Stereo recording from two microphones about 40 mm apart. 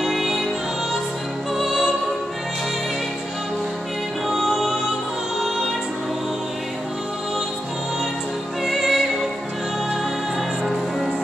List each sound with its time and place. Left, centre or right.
0.0 s music: centre
1.6 s music: centre
4.3 s music: centre
8.6 s music: centre
10.6 s music: centre